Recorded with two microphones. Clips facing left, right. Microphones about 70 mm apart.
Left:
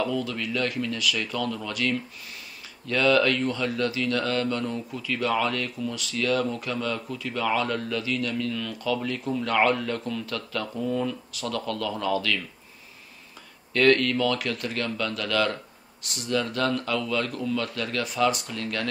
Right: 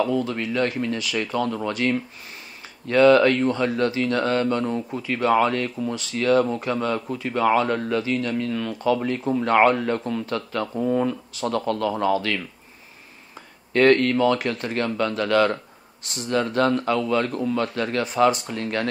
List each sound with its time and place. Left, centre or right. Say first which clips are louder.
0.0 s speech: right 5 dB; right
13.7 s speech: right 4 dB; right